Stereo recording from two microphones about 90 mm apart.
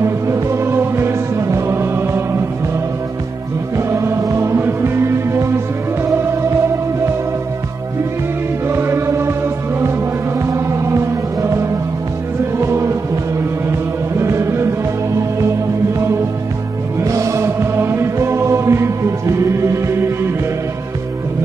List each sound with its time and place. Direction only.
0.0 s music: 30° right (ahead or behind)
3.7 s music: 30° right (ahead or behind)
8.6 s music: 25° right (ahead or behind)
10.4 s music: 30° right (ahead or behind)
17.0 s music: 35° right (ahead or behind)